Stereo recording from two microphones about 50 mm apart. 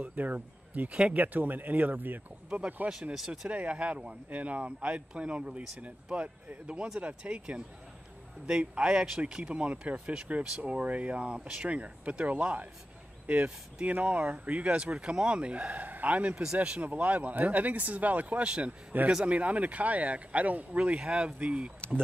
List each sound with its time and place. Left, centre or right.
0.0 s speech: right
1.2 s speech: right
2.5 s speech: right
2.9 s a man's voice: centre; by 12.6 s right
13.8 s speech: right